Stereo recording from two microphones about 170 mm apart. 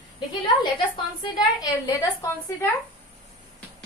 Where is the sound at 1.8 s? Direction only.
20° left (ahead or behind).